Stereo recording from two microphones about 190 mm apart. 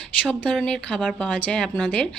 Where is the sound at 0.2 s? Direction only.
5° left (ahead or behind).